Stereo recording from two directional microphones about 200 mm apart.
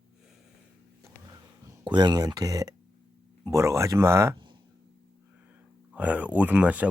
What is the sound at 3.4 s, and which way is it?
Speech, 15° right (ahead or behind).